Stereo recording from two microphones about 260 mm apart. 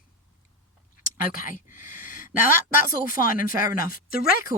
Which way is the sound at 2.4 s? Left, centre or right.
Centre.